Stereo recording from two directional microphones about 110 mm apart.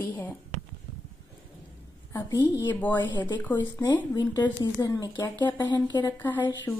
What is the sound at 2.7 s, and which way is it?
Speech, 15° left (ahead or behind).